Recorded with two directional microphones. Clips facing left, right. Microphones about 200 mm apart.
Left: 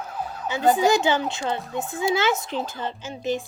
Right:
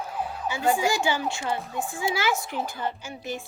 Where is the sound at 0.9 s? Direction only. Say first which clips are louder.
Left 5 dB; 20° left (ahead or behind).